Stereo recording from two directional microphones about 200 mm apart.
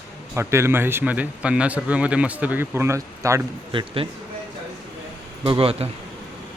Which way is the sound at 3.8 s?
25° right (ahead or behind).